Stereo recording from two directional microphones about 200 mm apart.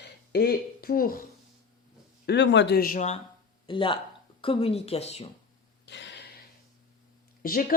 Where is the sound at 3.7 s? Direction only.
25° left (ahead or behind).